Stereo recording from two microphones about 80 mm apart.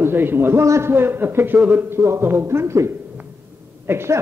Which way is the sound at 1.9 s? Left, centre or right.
Right.